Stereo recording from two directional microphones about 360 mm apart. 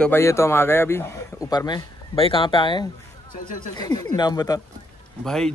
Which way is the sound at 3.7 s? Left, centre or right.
Centre.